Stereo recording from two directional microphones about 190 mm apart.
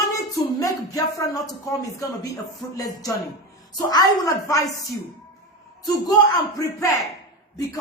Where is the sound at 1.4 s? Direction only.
15° left (ahead or behind).